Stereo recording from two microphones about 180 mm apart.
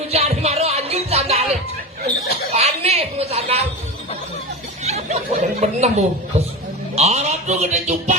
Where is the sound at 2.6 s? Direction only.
35° right (ahead or behind).